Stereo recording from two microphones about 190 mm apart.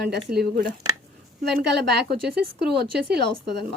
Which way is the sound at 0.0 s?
60° right (ahead or behind).